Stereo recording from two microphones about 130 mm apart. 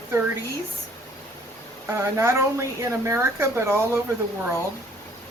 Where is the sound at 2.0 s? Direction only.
20° right (ahead or behind).